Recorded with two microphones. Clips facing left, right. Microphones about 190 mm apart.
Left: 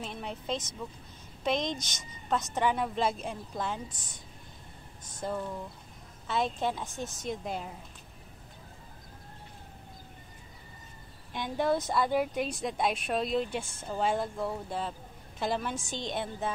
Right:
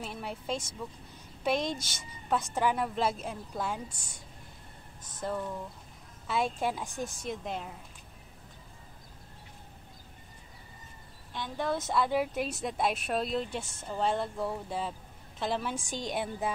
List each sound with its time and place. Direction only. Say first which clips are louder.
0.0 s a woman's voice: even; 5° right (ahead or behind)
5.2 s a woman's voice: even; centre (ahead or behind)
7.2 s speech: left 1 dB; centre (ahead or behind)
11.3 s speech: left 4 dB; 15° left (ahead or behind)
11.6 s a woman's voice: left 2 dB; centre (ahead or behind)